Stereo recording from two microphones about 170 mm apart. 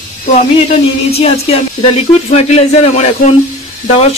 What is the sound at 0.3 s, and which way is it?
Speech, 40° left (ahead or behind).